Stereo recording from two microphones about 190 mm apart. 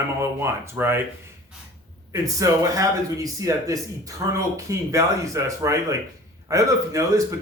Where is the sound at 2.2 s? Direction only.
15° right (ahead or behind).